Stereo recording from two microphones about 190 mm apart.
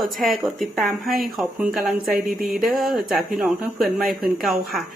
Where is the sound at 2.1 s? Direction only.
50° right (ahead or behind).